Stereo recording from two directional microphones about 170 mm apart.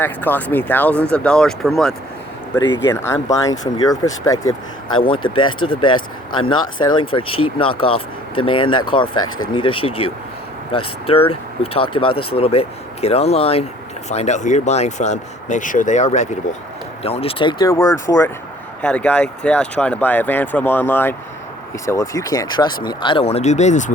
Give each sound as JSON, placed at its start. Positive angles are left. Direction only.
{"t": 0.0, "sound": "speech", "side_deg": 10}
{"t": 2.8, "sound": "speech", "side_deg": 15}
{"t": 18.8, "sound": "speech", "side_deg": 5}